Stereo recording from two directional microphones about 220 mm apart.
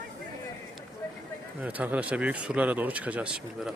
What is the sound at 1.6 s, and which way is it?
Speech, 5° right (ahead or behind).